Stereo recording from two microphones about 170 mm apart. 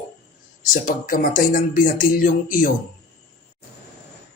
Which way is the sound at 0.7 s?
55° left (ahead or behind).